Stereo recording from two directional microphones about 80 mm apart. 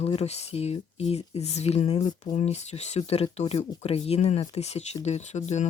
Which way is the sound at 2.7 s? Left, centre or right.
Left.